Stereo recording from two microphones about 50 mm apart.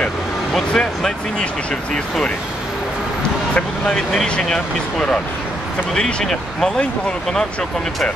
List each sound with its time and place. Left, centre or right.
0.7 s speech: centre
3.9 s speech: centre